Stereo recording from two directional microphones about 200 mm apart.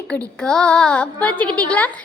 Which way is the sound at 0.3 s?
5° left (ahead or behind).